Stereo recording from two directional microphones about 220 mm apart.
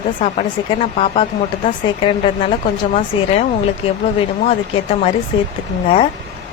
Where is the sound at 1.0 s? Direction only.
25° left (ahead or behind).